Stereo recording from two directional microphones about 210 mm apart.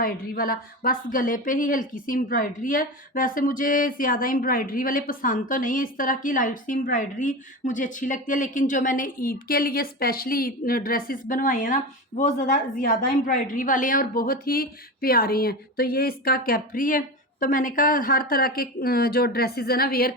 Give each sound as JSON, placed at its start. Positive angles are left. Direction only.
{"t": 0.0, "sound": "a woman's voice", "side_deg": 45}